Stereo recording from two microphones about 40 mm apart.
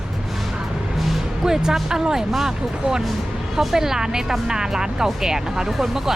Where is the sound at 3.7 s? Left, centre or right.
Centre.